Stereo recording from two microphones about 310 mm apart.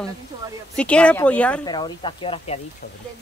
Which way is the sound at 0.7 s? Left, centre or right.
Centre.